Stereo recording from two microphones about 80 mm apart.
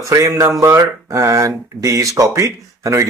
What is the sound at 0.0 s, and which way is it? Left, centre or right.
A man's voice, right.